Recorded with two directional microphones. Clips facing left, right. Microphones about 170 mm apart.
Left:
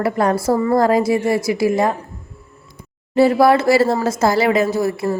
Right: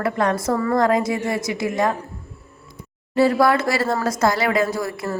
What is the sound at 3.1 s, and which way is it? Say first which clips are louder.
A woman's voice: left 4 dB; 30° left (ahead or behind).